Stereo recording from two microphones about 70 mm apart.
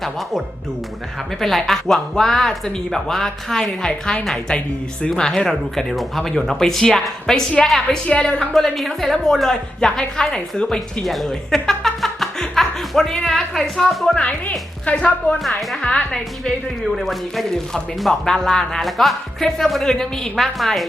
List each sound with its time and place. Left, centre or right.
1.4 s speech: centre
11.0 s music: centre
14.2 s speech: centre
16.9 s speech: centre